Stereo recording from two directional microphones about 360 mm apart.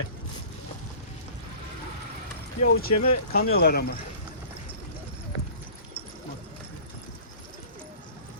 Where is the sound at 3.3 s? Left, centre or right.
Left.